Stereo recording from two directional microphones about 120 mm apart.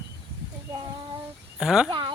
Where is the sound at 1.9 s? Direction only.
40° right (ahead or behind).